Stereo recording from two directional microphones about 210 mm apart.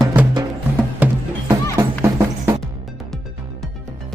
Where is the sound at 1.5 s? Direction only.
15° right (ahead or behind).